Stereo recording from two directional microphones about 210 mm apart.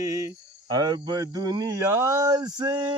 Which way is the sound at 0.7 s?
20° right (ahead or behind).